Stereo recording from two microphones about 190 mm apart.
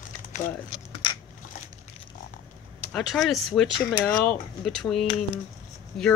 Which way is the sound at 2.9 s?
Centre (ahead or behind).